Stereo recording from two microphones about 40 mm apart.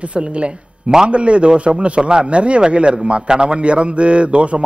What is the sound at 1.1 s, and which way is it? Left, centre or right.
A woman's voice, right.